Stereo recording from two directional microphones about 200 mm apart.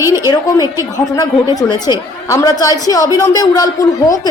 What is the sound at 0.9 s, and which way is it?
A woman's voice, 15° left (ahead or behind).